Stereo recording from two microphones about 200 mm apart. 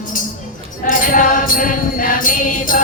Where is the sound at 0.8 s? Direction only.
45° left (ahead or behind).